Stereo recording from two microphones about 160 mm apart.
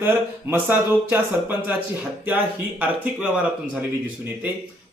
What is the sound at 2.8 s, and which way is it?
Speech, 10° right (ahead or behind).